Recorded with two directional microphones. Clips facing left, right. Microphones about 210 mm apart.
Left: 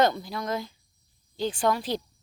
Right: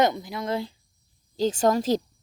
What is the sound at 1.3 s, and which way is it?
Speech, 40° right (ahead or behind).